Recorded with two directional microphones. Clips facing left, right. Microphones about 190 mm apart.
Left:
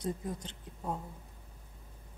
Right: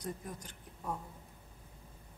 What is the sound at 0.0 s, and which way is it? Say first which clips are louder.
Speech: left 6 dB; 25° left (ahead or behind).